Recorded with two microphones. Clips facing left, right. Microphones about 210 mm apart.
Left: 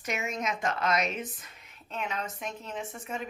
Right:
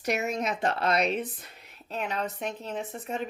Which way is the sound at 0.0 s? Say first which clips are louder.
Right 5 dB; 35° right (ahead or behind).